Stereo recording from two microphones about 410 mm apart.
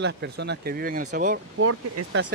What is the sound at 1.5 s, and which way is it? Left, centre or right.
Speech, right.